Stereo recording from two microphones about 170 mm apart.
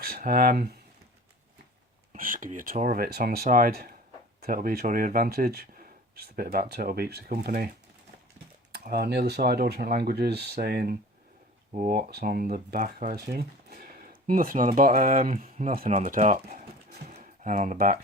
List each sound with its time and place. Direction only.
0.0 s speech: 60° right (ahead or behind)
2.1 s speech: 55° right (ahead or behind)
8.7 s speech: 65° right (ahead or behind)
11.7 s speech: 50° right (ahead or behind)
13.1 s speech: 65° right (ahead or behind); by 16.6 s 45° right (ahead or behind)
17.0 s a sound: 40° right (ahead or behind)